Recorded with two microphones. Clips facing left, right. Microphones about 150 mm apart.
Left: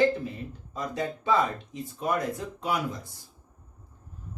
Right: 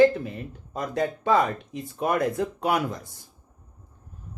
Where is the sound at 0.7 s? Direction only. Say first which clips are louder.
Right 5 dB; 60° right (ahead or behind).